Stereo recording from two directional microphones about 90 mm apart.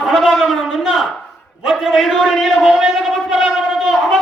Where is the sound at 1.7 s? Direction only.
Centre (ahead or behind).